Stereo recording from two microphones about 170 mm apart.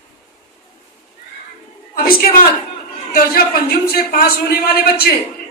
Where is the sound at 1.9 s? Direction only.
60° left (ahead or behind).